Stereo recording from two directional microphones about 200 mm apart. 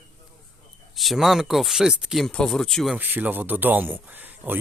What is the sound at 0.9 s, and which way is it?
Speech, centre (ahead or behind).